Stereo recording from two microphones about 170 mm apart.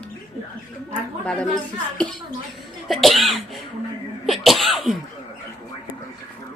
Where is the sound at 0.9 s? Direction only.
5° left (ahead or behind).